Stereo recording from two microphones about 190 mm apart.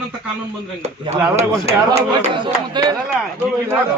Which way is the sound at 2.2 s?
25° right (ahead or behind).